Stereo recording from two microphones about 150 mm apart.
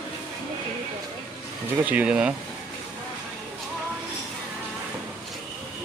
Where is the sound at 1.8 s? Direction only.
10° right (ahead or behind).